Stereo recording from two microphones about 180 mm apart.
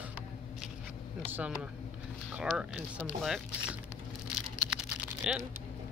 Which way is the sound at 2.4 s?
5° right (ahead or behind).